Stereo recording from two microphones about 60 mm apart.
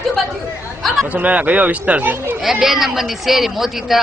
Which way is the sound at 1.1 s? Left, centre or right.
Right.